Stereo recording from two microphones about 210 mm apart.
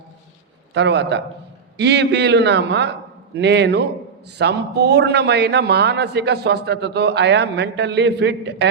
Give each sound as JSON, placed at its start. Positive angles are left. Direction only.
{"t": 0.7, "sound": "a man's voice", "side_deg": -55}